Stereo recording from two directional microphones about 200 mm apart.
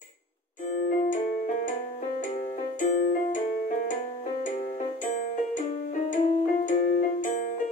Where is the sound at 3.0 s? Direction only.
45° left (ahead or behind).